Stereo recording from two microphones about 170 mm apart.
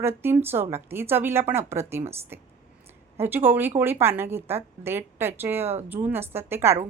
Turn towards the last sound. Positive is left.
turn(degrees=-15)  # may be behind; listen again after turning